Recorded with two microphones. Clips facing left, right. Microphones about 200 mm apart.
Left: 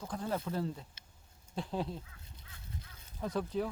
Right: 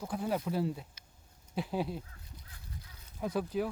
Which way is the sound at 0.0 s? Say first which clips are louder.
Right 3 dB; 10° right (ahead or behind).